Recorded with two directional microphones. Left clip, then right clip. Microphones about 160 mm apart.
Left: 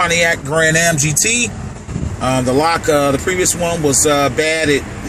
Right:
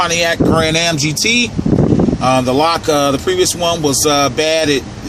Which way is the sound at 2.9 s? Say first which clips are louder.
Even; 10° right (ahead or behind).